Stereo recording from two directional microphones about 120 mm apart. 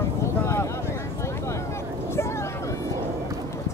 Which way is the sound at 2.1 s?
20° left (ahead or behind).